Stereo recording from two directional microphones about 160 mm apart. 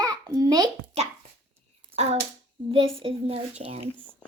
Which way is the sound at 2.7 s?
35° right (ahead or behind).